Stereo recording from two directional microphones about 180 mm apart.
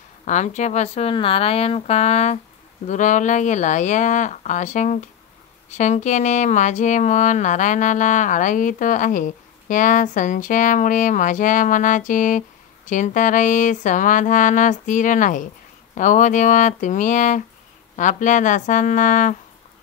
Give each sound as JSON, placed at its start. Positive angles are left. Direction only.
{"t": 0.2, "sound": "a woman's voice", "side_deg": 40}